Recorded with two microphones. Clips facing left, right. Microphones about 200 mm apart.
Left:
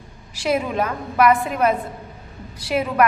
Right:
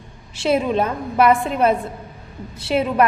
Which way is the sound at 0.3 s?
25° right (ahead or behind).